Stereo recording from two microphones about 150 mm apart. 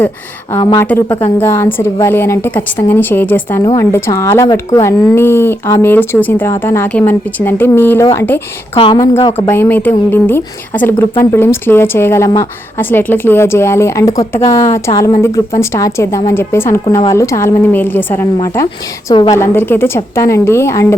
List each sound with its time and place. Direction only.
0.8 s speech: 15° left (ahead or behind)
8.7 s speech: 35° left (ahead or behind)
9.5 s speech: 15° left (ahead or behind)